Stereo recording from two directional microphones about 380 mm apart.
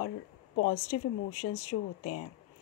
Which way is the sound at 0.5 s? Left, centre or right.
Left.